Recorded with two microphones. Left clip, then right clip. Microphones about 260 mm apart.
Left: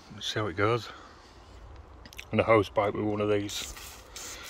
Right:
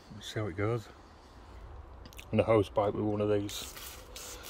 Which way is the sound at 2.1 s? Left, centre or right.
Centre.